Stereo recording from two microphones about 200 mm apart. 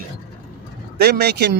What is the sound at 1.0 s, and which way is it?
Speech, 55° right (ahead or behind).